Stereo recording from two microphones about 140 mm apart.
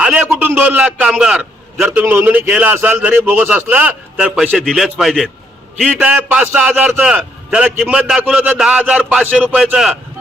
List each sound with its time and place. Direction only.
0.0 s a man's voice: 10° right (ahead or behind)